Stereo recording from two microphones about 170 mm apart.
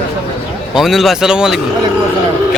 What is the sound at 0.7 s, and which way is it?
Speech, centre (ahead or behind).